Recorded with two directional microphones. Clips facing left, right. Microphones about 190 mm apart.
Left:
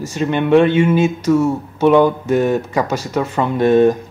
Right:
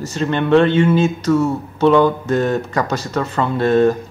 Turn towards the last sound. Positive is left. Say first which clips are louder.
# left 2 dB
turn(degrees=15)  # may be behind; listen again after turning